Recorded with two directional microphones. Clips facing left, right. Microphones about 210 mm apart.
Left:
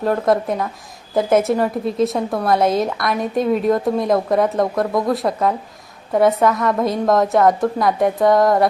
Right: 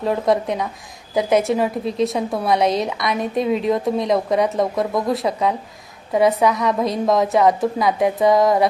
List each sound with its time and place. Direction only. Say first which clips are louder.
0.0 s a woman's voice: left 1 dB; centre (ahead or behind)